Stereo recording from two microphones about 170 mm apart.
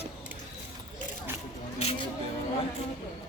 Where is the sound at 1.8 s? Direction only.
35° left (ahead or behind).